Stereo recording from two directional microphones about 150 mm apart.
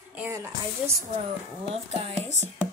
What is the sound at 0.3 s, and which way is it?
Speech, 20° right (ahead or behind).